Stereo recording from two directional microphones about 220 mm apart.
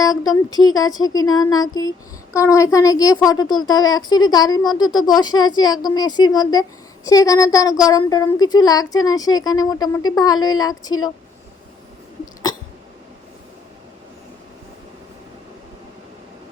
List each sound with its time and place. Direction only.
0.0 s speech: 15° left (ahead or behind)
12.2 s hiccup: 15° left (ahead or behind)